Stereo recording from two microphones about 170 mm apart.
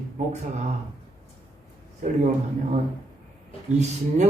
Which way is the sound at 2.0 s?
45° right (ahead or behind).